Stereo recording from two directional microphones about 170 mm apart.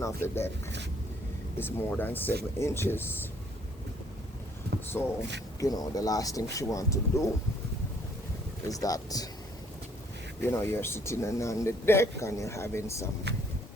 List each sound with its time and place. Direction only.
0.0 s speech: 15° left (ahead or behind)
1.5 s speech: 10° left (ahead or behind)
4.9 s speech: 15° left (ahead or behind)
8.6 s speech: 20° left (ahead or behind)
10.4 s speech: 15° left (ahead or behind)
13.3 s speech: 80° right